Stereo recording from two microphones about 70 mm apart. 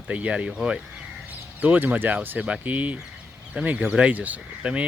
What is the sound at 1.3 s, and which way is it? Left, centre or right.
Speech, right.